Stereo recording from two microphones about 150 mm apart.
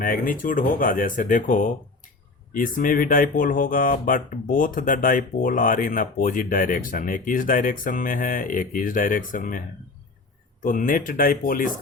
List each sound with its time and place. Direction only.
0.0 s speech: 65° left (ahead or behind)